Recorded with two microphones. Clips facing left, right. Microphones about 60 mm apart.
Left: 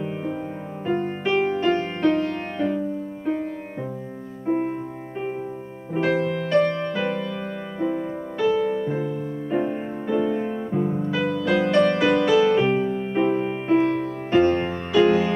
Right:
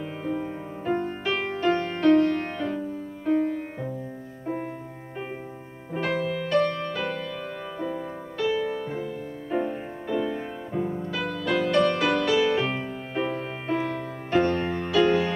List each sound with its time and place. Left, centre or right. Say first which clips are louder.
0.0 s music: left 2 dB; centre
4.5 s music: left 8 dB; left
5.9 s music: left 5 dB; centre
6.3 s music: left 3 dB; centre
6.6 s music: left 4 dB; left
8.7 s music: left 6 dB; centre